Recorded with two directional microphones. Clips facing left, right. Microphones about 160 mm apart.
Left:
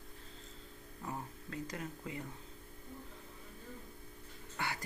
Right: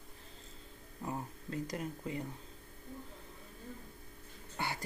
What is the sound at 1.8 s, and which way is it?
Speech, 30° right (ahead or behind).